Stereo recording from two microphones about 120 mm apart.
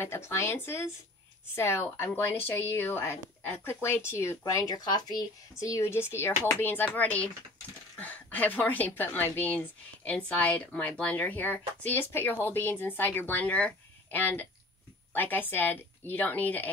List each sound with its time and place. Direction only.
0.0 s a woman's voice: 20° left (ahead or behind)